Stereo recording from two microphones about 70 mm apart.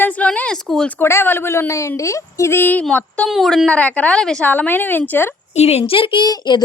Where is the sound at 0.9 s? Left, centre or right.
Left.